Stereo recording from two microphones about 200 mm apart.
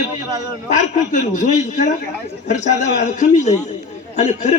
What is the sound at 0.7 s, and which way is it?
A man's voice, 35° left (ahead or behind).